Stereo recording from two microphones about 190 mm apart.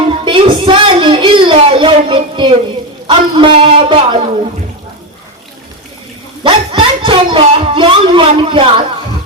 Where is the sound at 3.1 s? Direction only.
25° right (ahead or behind).